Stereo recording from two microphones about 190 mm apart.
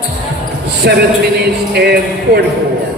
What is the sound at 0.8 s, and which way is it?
A man's voice, 60° right (ahead or behind).